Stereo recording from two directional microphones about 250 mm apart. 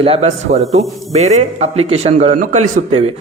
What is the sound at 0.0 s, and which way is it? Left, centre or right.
Speech, right.